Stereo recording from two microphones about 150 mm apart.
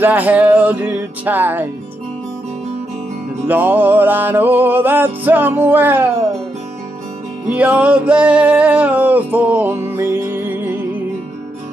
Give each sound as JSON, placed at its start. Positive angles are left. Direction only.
{"t": 0.0, "sound": "music", "side_deg": -10}
{"t": 3.4, "sound": "music", "side_deg": -10}
{"t": 7.4, "sound": "music", "side_deg": -10}